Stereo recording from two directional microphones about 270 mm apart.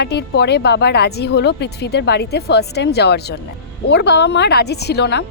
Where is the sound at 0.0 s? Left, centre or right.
Left.